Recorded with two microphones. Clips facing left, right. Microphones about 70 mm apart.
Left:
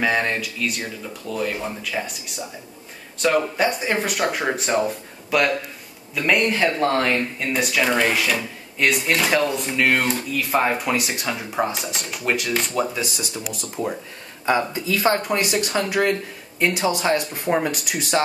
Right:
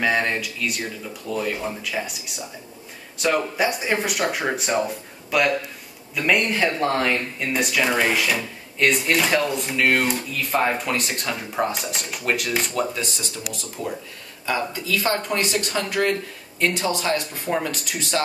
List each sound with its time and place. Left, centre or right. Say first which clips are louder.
0.0 s speech: even; centre; by 15.2 s left
15.5 s speech: left 2 dB; centre